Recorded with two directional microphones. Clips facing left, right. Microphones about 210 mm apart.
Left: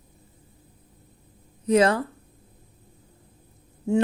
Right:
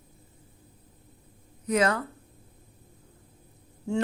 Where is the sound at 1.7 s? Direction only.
30° left (ahead or behind).